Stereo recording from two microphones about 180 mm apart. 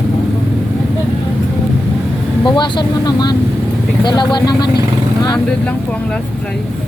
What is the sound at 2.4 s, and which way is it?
Speech, 25° left (ahead or behind).